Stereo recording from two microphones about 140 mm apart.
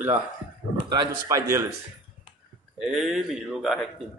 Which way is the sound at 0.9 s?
25° right (ahead or behind).